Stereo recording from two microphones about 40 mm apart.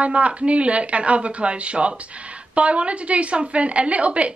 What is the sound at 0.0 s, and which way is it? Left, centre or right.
A woman's voice, right.